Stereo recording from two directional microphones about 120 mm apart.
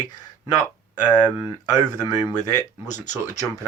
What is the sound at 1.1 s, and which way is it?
Speech, 35° left (ahead or behind).